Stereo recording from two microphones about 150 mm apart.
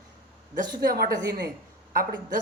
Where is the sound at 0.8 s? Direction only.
90° right.